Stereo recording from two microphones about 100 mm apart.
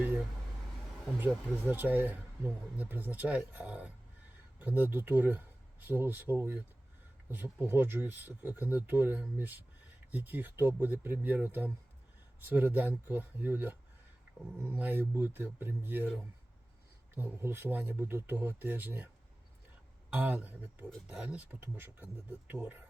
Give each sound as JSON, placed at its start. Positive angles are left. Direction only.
{"t": 1.2, "sound": "speech", "side_deg": -20}
{"t": 17.2, "sound": "speech", "side_deg": -20}
{"t": 20.1, "sound": "speech", "side_deg": -15}